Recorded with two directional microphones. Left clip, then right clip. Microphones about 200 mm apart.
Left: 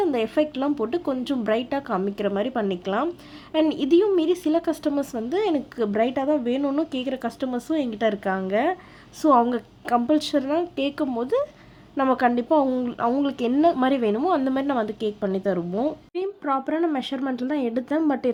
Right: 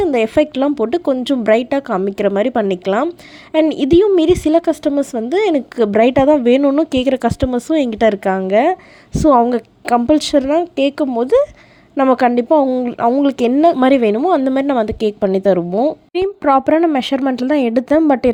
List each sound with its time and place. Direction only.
0.0 s a woman's voice: 35° right (ahead or behind)
15.7 s a woman's voice: 30° right (ahead or behind)
16.1 s a woman's voice: 45° right (ahead or behind)